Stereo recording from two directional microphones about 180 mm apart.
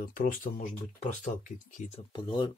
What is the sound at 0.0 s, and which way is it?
Speech, 50° left (ahead or behind).